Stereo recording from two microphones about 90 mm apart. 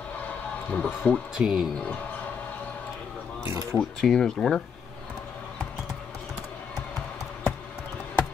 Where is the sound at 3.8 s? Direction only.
5° left (ahead or behind).